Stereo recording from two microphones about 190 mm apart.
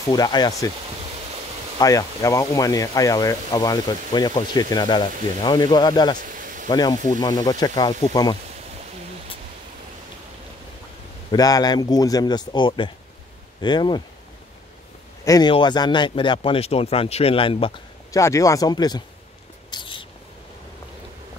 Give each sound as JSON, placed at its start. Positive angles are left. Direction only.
{"t": 0.1, "sound": "speech", "side_deg": 20}
{"t": 1.8, "sound": "speech", "side_deg": 20}
{"t": 6.1, "sound": "a sound", "side_deg": -45}
{"t": 6.7, "sound": "speech", "side_deg": 20}
{"t": 11.3, "sound": "speech", "side_deg": 20}
{"t": 15.2, "sound": "speech", "side_deg": 20}
{"t": 18.2, "sound": "speech", "side_deg": 15}
{"t": 19.7, "sound": "a sound", "side_deg": 25}